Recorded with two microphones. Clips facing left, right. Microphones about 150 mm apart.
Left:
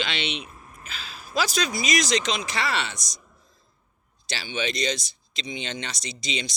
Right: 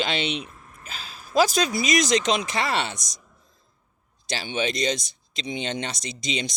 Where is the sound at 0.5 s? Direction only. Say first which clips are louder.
Left 2 dB; 20° left (ahead or behind).